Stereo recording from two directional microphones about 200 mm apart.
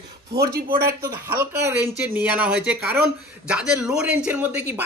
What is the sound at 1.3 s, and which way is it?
A man's voice, 10° right (ahead or behind).